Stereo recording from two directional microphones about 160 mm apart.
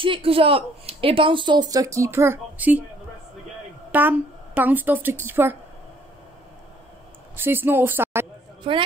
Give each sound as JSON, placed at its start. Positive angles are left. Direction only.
{"t": 0.0, "sound": "speech", "side_deg": -35}
{"t": 3.9, "sound": "a woman's voice", "side_deg": -10}
{"t": 7.3, "sound": "a woman's voice", "side_deg": -15}
{"t": 8.6, "sound": "a woman's voice", "side_deg": -35}